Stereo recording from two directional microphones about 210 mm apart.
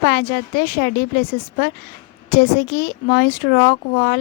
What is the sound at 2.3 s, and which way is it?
A woman's voice, 45° left (ahead or behind).